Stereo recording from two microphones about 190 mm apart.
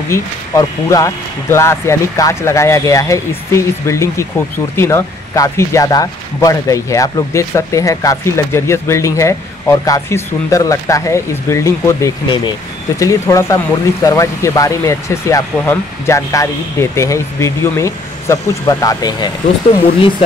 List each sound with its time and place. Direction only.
0.1 s speech: 15° left (ahead or behind)